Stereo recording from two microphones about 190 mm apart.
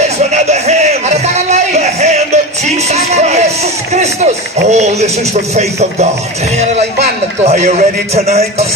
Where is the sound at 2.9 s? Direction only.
35° right (ahead or behind).